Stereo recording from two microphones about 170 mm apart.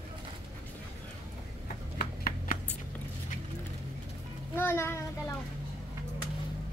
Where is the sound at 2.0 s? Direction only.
60° left (ahead or behind).